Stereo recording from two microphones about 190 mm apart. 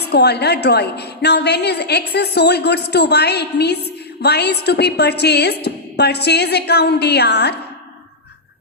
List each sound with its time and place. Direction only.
0.1 s a woman's voice: 60° left (ahead or behind)